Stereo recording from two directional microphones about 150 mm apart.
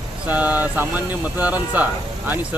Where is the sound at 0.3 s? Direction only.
10° right (ahead or behind).